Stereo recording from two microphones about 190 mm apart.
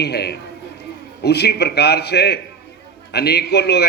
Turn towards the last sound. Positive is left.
turn(degrees=60)  # may be behind; listen again after turning